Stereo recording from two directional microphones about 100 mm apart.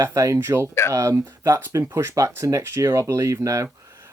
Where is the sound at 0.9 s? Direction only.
25° right (ahead or behind).